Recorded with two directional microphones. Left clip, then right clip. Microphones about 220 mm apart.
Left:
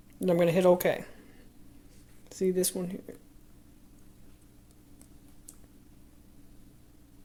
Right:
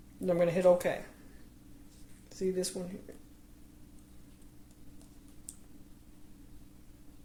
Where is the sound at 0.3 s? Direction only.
40° left (ahead or behind).